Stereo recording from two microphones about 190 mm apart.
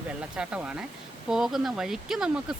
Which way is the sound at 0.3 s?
5° right (ahead or behind).